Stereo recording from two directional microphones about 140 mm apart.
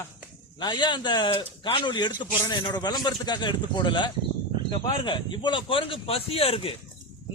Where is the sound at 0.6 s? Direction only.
35° left (ahead or behind).